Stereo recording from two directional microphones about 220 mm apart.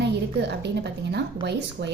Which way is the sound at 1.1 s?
50° right (ahead or behind).